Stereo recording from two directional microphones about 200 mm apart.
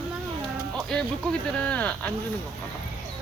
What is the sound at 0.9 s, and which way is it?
A child's voice, 5° left (ahead or behind).